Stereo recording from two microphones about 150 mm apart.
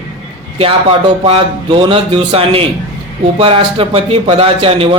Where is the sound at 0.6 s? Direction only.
35° right (ahead or behind).